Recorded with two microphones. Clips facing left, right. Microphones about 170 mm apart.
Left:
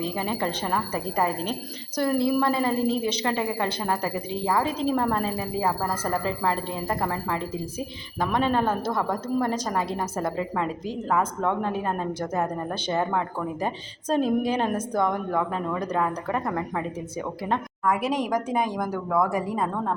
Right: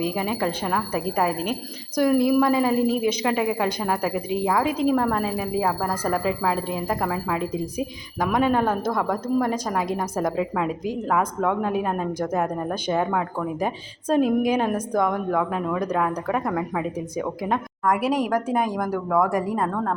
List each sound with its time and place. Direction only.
0.0 s a woman's voice: 10° right (ahead or behind)
13.0 s a woman's voice: centre (ahead or behind)
19.5 s a woman's voice: centre (ahead or behind)